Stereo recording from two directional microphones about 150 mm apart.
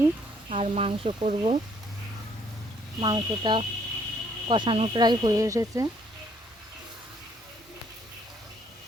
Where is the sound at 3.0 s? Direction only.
30° right (ahead or behind).